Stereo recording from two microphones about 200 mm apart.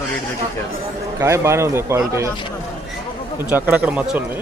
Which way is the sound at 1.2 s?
15° right (ahead or behind).